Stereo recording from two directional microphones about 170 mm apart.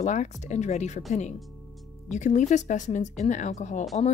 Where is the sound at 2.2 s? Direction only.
45° left (ahead or behind).